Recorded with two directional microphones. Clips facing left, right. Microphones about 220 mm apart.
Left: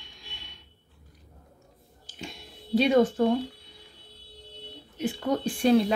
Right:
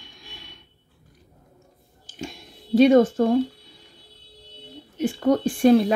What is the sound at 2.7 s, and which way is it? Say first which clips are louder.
Speech: right 6 dB; 45° right (ahead or behind).